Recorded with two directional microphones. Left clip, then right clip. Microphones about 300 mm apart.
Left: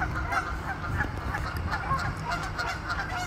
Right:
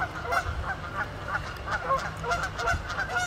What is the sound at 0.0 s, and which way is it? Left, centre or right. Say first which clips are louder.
Honk: right 1 dB; centre.